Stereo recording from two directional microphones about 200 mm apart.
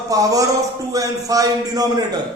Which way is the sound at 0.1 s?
15° right (ahead or behind).